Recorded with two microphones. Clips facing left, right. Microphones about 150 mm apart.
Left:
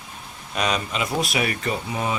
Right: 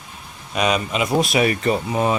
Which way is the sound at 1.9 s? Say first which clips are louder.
Right 6 dB; 45° right (ahead or behind).